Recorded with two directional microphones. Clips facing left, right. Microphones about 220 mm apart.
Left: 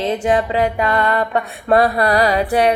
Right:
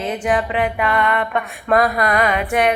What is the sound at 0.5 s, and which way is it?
Music, 35° left (ahead or behind).